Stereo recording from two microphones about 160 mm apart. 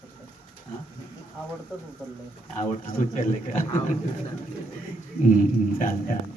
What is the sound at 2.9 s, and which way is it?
A man's voice, 55° left (ahead or behind).